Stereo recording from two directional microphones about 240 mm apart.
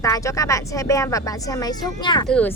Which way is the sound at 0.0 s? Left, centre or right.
Centre.